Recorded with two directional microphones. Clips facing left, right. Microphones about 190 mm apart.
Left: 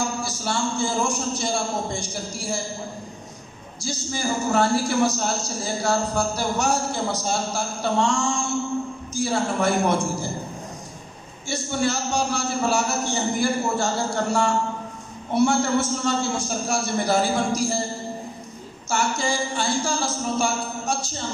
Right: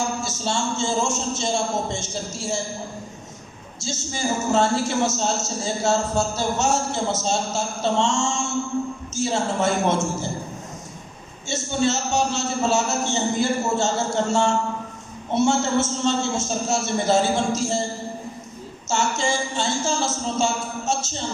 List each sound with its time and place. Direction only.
0.2 s a man's voice: 25° right (ahead or behind)
3.8 s a man's voice: 25° right (ahead or behind)
11.4 s a man's voice: 25° right (ahead or behind)
18.9 s a man's voice: 25° right (ahead or behind)